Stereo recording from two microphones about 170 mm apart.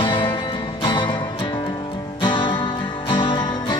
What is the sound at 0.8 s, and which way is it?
Music, 30° left (ahead or behind).